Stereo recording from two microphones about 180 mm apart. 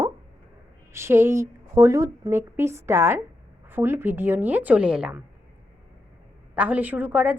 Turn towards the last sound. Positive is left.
turn(degrees=-10)  # may be behind; listen again after turning